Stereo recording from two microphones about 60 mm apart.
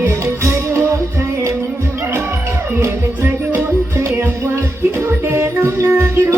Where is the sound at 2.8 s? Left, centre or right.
Right.